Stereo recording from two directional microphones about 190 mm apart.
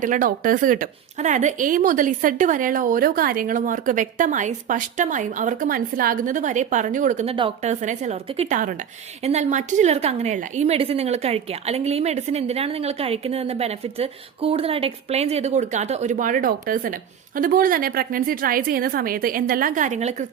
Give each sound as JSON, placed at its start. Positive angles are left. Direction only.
{"t": 0.0, "sound": "a woman's voice", "side_deg": -45}